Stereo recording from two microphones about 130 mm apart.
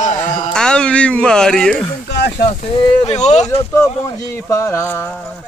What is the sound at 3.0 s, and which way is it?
Speech, 60° left (ahead or behind).